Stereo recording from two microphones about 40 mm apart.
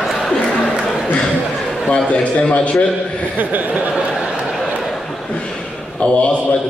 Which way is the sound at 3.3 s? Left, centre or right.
Right.